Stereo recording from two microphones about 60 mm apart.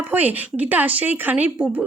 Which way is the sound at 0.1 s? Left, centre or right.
Right.